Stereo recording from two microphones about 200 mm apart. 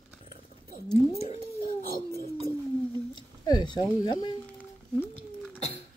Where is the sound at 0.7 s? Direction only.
35° left (ahead or behind).